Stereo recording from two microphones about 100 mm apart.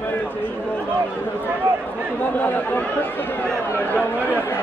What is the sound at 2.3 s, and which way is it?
Speech, 15° left (ahead or behind).